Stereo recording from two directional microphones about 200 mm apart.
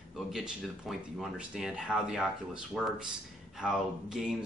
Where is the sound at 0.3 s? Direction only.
Centre (ahead or behind).